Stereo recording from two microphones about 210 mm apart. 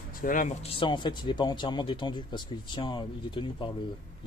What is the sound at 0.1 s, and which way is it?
Speech, 40° left (ahead or behind).